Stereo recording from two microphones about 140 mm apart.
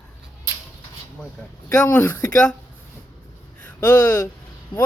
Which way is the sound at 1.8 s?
15° left (ahead or behind).